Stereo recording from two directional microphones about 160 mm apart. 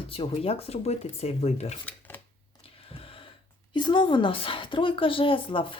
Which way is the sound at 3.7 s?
30° left (ahead or behind).